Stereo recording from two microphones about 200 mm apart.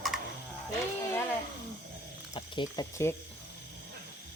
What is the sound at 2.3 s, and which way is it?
Speech, 20° left (ahead or behind).